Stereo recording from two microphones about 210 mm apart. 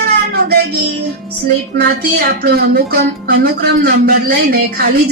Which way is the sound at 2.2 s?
45° right (ahead or behind).